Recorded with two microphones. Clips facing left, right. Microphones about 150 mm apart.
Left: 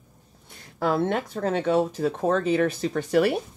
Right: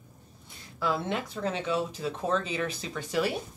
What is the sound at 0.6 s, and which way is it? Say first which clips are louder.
Speech: left 7 dB; 55° left (ahead or behind).